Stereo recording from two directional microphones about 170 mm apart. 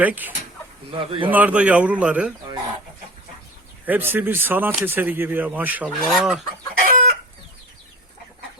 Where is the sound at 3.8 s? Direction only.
10° right (ahead or behind).